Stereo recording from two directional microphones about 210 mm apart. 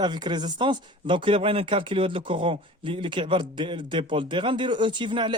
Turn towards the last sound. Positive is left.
turn(degrees=-20)  # may be behind; listen again after turning